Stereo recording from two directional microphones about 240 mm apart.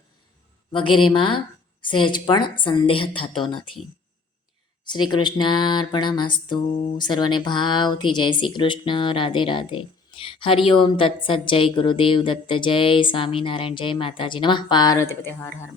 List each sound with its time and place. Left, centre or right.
0.7 s speech: left
4.9 s speech: centre